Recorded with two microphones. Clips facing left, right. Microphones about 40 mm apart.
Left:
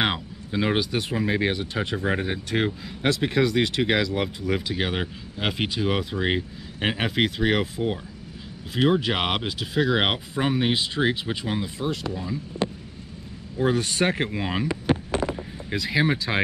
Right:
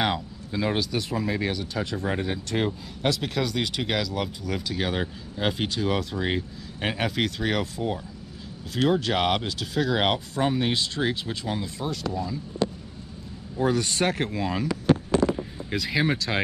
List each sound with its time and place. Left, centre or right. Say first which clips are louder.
0.0 s speech: left 1 dB; left
1.2 s speech: left 7 dB; left
1.5 s speech: left 2 dB; left
13.7 s speech: left 1 dB; left
14.6 s a sound: right 3 dB; centre